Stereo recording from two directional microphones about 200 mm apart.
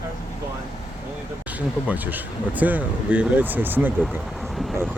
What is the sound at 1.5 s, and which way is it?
Speech, 10° right (ahead or behind).